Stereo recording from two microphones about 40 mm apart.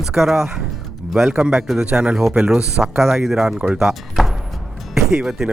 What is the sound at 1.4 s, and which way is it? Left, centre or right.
Speech, centre.